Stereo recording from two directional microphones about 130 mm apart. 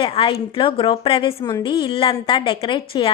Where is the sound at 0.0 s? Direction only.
40° left (ahead or behind).